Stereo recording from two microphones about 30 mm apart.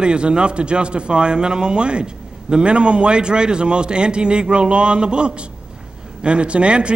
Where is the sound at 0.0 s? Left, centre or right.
Right.